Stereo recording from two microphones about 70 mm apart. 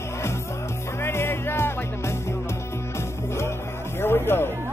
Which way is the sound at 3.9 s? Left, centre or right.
Left.